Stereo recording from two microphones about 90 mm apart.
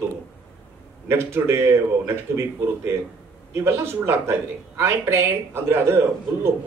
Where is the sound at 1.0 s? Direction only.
30° right (ahead or behind).